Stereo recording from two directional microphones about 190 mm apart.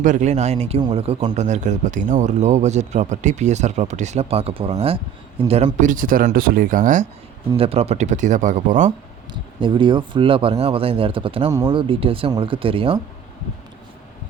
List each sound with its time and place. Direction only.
0.0 s speech: 40° right (ahead or behind)
1.3 s speech: 40° right (ahead or behind)
7.5 s speech: 30° right (ahead or behind)
9.3 s speech: 25° right (ahead or behind)